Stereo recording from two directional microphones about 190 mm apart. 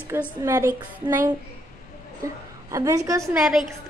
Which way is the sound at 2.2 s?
15° right (ahead or behind).